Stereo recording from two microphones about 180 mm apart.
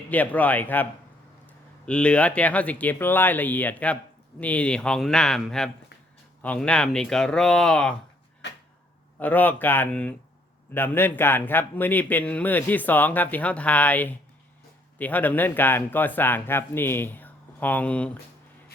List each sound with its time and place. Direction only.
0.1 s a man's voice: 10° left (ahead or behind)
1.9 s a man's voice: 5° left (ahead or behind)
8.4 s a sound: 75° left (ahead or behind)
9.1 s a man's voice: 10° left (ahead or behind)